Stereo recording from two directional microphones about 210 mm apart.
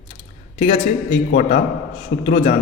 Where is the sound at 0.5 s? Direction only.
30° left (ahead or behind).